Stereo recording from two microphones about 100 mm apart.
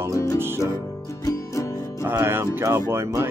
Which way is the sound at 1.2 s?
30° left (ahead or behind).